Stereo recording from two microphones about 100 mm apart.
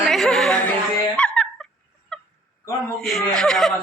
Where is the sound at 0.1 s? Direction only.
Centre (ahead or behind).